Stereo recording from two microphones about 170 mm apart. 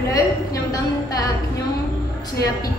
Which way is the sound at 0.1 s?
20° left (ahead or behind).